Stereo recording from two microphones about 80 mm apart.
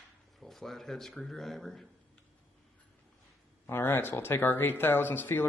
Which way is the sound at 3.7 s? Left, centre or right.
Left.